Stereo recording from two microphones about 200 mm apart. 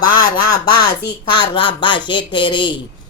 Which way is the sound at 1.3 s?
25° left (ahead or behind).